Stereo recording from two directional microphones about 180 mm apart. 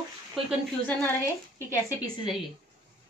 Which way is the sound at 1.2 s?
15° left (ahead or behind).